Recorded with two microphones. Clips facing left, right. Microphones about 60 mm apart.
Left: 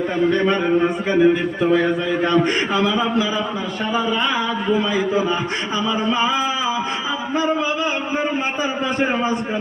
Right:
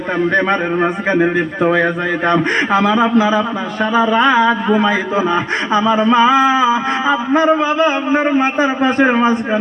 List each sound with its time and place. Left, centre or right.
0.3 s a man's voice: right